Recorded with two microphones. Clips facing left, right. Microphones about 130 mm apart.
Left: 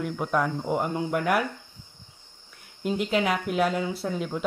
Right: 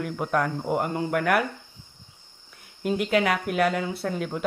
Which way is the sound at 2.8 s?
Centre (ahead or behind).